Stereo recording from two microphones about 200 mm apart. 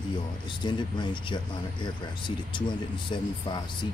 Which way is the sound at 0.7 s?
20° left (ahead or behind).